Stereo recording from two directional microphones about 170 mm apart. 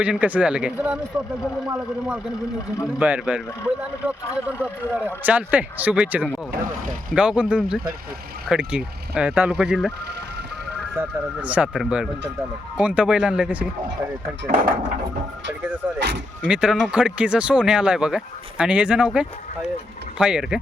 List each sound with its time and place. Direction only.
0.0 s speech: 10° right (ahead or behind)
10.9 s speech: 10° right (ahead or behind)
14.4 s speech: 55° right (ahead or behind)
16.0 s speech: 75° right (ahead or behind)
16.5 s speech: 5° right (ahead or behind)